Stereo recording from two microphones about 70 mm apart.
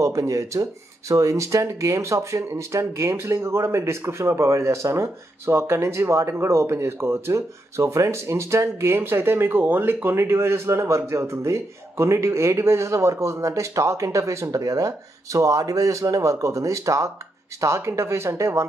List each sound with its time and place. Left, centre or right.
0.0 s speech: right